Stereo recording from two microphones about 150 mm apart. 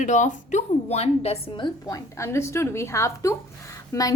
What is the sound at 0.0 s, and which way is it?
A woman's voice, 55° left (ahead or behind).